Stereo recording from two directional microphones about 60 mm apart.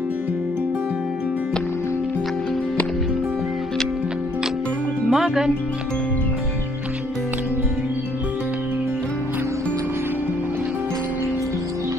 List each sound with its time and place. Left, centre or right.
5.1 s speech: centre